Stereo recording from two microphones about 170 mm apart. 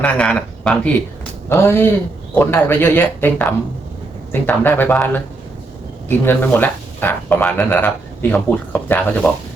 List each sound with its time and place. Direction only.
0.0 s speech: 5° left (ahead or behind)